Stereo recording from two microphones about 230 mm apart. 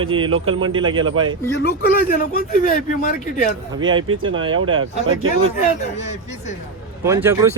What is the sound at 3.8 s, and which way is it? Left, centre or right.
Speech, right.